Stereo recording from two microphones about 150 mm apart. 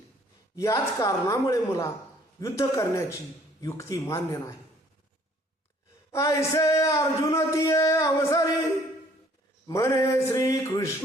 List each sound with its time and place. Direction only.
0.5 s a man's voice: 20° left (ahead or behind)
6.1 s a man's voice: 20° left (ahead or behind)
9.6 s a man's voice: 20° left (ahead or behind)